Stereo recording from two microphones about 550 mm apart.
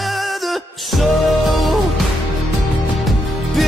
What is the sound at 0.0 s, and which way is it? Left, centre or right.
Music, centre.